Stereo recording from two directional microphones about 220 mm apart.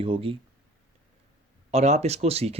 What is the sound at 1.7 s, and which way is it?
Speech, 30° right (ahead or behind).